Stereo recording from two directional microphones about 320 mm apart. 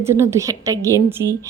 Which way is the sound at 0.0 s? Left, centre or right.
Centre.